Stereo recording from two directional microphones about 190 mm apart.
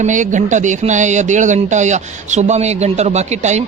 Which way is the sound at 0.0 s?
40° right (ahead or behind).